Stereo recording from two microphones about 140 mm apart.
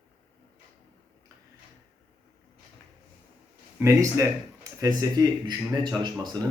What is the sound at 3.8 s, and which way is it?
Speech, 20° right (ahead or behind).